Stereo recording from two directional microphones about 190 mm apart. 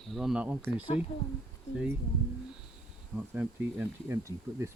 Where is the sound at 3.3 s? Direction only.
10° right (ahead or behind).